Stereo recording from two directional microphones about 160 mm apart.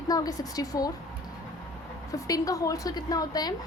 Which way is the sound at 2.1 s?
20° left (ahead or behind).